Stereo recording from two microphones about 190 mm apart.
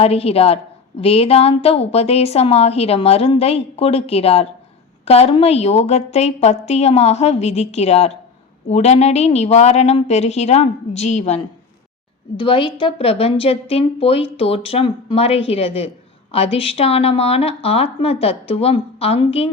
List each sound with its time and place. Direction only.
0.0 s a woman's voice: 30° left (ahead or behind)
12.4 s a woman's voice: 25° left (ahead or behind)